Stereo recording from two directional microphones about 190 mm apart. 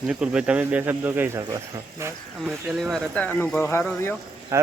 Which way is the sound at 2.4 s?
5° right (ahead or behind).